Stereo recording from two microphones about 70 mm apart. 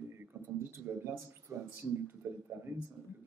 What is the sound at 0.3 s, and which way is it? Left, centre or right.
Speech, right.